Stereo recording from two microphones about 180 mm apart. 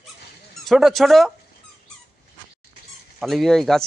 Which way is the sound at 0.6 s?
Centre (ahead or behind).